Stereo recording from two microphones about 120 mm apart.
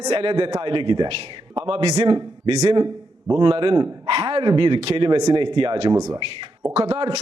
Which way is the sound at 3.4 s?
45° right (ahead or behind).